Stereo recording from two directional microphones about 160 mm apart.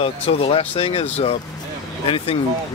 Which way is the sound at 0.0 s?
40° left (ahead or behind).